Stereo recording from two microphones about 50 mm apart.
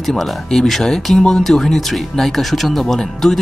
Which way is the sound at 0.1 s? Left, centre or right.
Centre.